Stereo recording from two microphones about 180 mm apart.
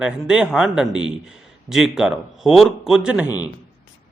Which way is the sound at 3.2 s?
20° left (ahead or behind).